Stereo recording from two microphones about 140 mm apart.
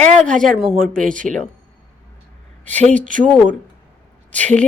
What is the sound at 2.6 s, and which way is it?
Speech, 10° left (ahead or behind).